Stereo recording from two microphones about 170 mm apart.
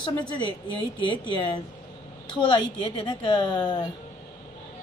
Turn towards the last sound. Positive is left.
turn(degrees=25)  # may be behind; listen again after turning